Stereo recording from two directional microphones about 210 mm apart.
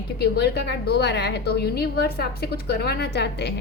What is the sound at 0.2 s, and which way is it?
A woman's voice, 50° left (ahead or behind).